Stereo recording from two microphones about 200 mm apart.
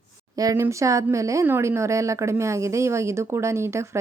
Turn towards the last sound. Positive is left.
turn(degrees=-15)  # may be behind; listen again after turning